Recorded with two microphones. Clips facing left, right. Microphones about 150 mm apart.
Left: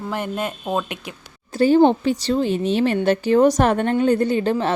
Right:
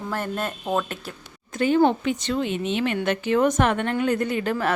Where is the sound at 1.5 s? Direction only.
35° left (ahead or behind).